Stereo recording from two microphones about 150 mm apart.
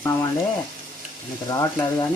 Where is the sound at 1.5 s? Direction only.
25° left (ahead or behind).